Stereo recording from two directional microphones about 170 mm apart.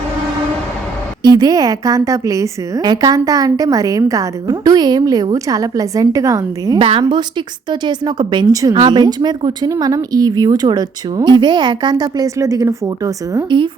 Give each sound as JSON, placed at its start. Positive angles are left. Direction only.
{"t": 1.2, "sound": "speech", "side_deg": -25}
{"t": 6.7, "sound": "a woman's voice", "side_deg": -30}